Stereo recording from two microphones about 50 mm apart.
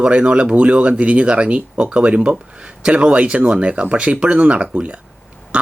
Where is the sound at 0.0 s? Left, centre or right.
Right.